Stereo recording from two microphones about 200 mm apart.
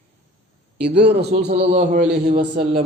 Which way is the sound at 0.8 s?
55° right (ahead or behind).